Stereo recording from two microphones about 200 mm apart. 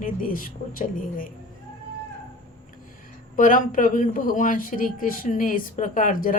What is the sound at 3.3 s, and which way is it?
A man's voice, 40° left (ahead or behind).